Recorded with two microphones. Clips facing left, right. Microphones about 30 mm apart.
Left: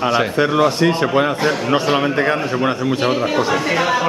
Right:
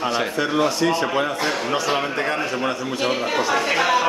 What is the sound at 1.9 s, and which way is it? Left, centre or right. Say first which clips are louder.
A man's voice: left 6 dB; left.